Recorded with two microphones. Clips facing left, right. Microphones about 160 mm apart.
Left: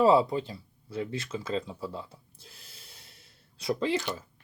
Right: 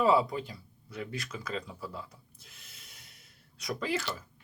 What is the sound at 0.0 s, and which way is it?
Speech, 30° left (ahead or behind).